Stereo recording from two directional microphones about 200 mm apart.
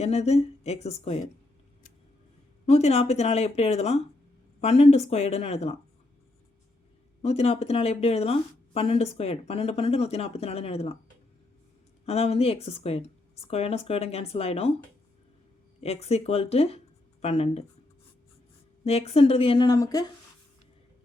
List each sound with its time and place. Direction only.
0.0 s speech: 30° left (ahead or behind)
2.6 s speech: 30° left (ahead or behind)
7.2 s speech: 30° left (ahead or behind)
12.0 s speech: 30° left (ahead or behind)
15.8 s speech: 30° left (ahead or behind)
18.9 s speech: 30° left (ahead or behind)